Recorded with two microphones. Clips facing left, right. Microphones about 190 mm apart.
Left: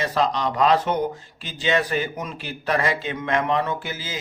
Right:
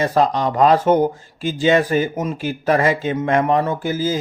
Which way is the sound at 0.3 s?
50° right (ahead or behind).